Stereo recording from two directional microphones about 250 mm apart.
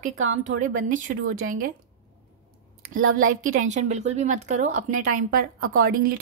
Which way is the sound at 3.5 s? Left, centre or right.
Right.